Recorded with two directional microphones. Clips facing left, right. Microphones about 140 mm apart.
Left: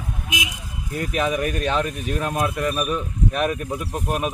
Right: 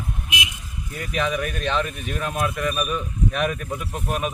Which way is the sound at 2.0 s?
40° left (ahead or behind).